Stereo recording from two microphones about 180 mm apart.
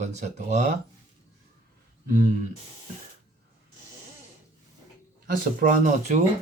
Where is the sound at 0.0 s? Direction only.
40° right (ahead or behind).